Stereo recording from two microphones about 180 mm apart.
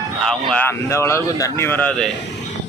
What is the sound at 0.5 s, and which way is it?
A man's voice, 15° left (ahead or behind).